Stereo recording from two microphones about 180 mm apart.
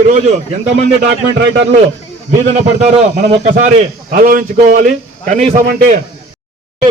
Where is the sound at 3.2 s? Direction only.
40° right (ahead or behind).